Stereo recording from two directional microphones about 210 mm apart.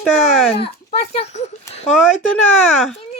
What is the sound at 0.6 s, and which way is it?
Speech, 30° left (ahead or behind).